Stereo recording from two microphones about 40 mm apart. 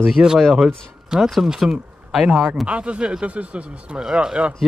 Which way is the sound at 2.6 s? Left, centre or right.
Right.